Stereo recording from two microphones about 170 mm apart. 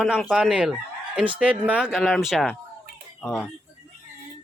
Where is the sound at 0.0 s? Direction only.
Centre (ahead or behind).